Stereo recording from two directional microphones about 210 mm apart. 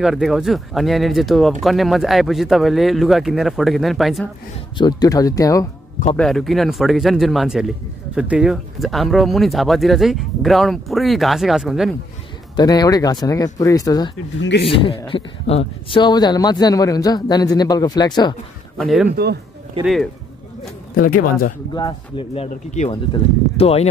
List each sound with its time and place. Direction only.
0.0 s speech: centre (ahead or behind)
4.7 s speech: 20° left (ahead or behind)
6.1 s speech: centre (ahead or behind)
12.5 s speech: 20° left (ahead or behind)
14.4 s speech: 55° left (ahead or behind)
14.7 s speech: 25° left (ahead or behind)
18.8 s speech: centre (ahead or behind)
20.9 s speech: 40° left (ahead or behind)
21.7 s speech: 20° left (ahead or behind)